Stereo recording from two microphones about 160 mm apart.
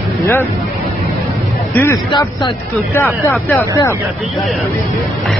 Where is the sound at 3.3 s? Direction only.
10° left (ahead or behind).